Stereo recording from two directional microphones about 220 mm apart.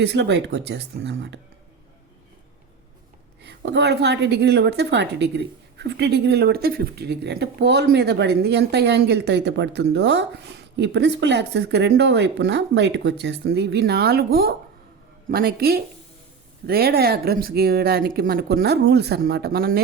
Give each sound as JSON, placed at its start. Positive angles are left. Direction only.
{"t": 0.0, "sound": "a woman's voice", "side_deg": -50}
{"t": 3.4, "sound": "a woman's voice", "side_deg": -50}